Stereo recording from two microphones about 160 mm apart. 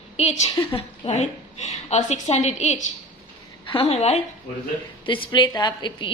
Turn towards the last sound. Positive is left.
turn(degrees=30)  # may be behind; listen again after turning